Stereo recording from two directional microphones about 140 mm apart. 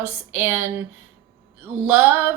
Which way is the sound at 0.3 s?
10° right (ahead or behind).